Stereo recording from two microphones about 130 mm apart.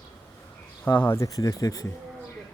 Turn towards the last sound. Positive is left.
turn(degrees=25)  # may be behind; listen again after turning